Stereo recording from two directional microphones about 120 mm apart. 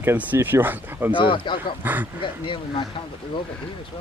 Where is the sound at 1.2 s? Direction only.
45° left (ahead or behind).